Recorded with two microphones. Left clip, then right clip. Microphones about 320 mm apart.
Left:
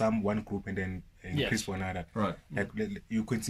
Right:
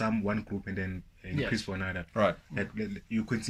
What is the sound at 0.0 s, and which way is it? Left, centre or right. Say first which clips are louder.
Speech: left 2 dB; centre.